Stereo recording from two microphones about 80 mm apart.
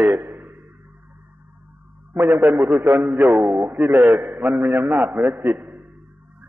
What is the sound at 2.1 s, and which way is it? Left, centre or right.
A man's voice, right.